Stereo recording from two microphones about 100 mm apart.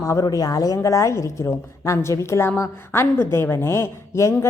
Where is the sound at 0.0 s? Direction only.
35° left (ahead or behind).